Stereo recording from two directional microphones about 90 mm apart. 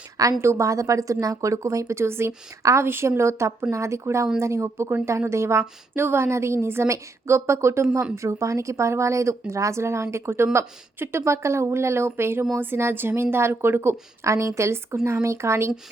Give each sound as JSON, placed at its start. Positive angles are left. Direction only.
{"t": 0.4, "sound": "speech", "side_deg": -35}